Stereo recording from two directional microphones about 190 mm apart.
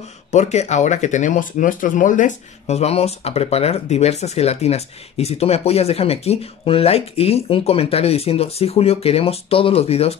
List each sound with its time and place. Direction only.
0.3 s speech: 35° left (ahead or behind)